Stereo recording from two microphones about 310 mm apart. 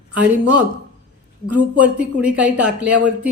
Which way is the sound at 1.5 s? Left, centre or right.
Centre.